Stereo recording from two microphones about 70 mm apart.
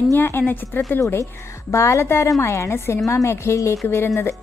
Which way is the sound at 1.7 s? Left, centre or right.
Left.